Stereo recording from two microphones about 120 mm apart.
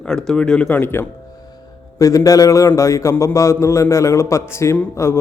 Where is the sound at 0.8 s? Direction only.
20° left (ahead or behind).